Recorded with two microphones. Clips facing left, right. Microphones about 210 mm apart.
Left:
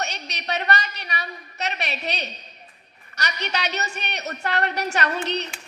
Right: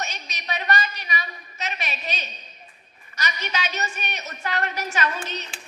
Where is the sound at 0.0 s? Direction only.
65° left (ahead or behind).